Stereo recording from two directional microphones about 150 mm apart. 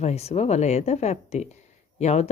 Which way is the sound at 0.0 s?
45° left (ahead or behind).